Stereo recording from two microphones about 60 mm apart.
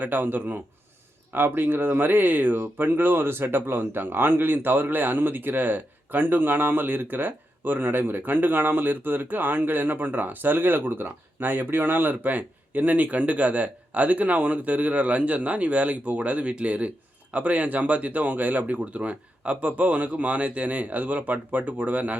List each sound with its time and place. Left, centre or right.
0.0 s speech: right